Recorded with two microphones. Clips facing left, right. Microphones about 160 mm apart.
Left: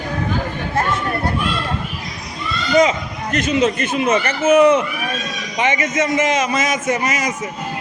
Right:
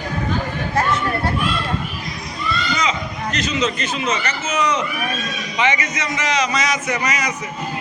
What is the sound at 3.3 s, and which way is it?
A man's voice, 55° left (ahead or behind).